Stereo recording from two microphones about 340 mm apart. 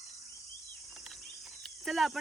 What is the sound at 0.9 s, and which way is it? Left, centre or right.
Cricket, centre.